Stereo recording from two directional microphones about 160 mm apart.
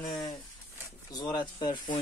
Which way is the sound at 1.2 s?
30° left (ahead or behind).